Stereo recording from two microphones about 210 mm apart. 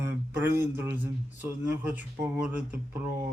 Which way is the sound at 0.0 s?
10° right (ahead or behind).